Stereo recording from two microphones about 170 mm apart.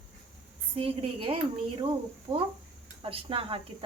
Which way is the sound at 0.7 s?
35° right (ahead or behind).